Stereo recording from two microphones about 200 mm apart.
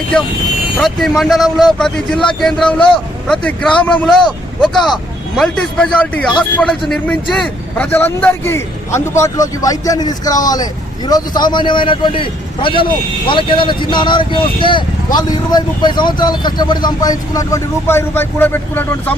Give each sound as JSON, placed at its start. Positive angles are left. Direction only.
{"t": 0.8, "sound": "a man's voice", "side_deg": 0}